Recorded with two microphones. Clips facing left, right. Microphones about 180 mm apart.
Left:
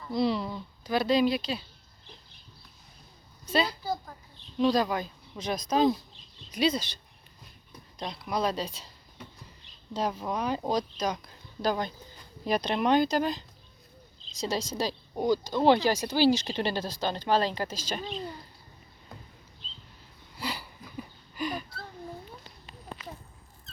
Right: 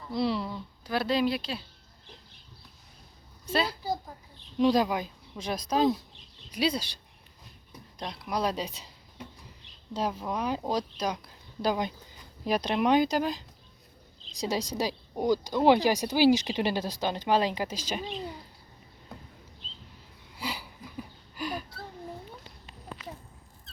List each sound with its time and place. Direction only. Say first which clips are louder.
0.1 s speech: left 1 dB; 5° right (ahead or behind)
3.5 s speech: left 1 dB; 5° right (ahead or behind)
4.5 s speech: right 1 dB; 15° right (ahead or behind)
8.0 s speech: left 1 dB; 5° right (ahead or behind)
14.4 s speech: right 1 dB; 15° right (ahead or behind)
20.4 s a sound: left 1 dB; 10° right (ahead or behind)